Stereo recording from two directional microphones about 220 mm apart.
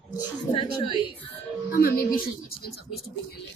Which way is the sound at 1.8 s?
40° left (ahead or behind).